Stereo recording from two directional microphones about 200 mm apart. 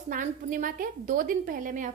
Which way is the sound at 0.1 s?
40° right (ahead or behind).